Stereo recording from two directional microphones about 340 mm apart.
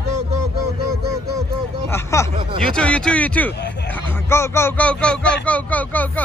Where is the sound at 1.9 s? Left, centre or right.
Centre.